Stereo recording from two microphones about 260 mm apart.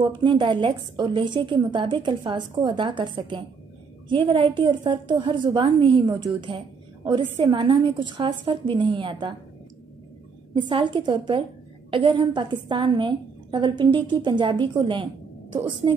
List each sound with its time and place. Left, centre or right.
0.0 s a woman's voice: centre
10.5 s a woman's voice: centre